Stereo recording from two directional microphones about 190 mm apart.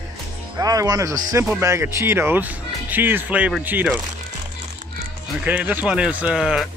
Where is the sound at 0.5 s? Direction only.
20° right (ahead or behind).